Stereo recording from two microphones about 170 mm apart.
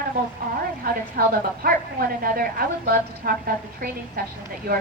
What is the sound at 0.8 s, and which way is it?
A woman's voice, 60° right (ahead or behind).